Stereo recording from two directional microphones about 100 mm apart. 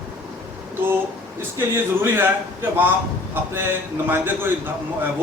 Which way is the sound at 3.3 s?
25° right (ahead or behind).